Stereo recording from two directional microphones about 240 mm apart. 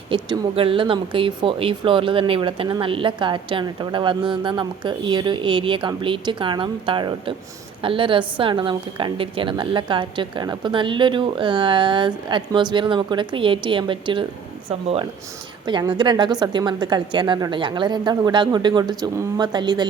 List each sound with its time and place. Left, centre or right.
0.1 s speech: right
15.6 s speech: centre